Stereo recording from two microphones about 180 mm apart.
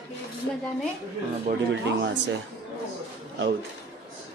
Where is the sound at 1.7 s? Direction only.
80° right.